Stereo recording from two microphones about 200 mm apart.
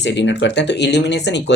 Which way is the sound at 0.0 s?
60° left (ahead or behind).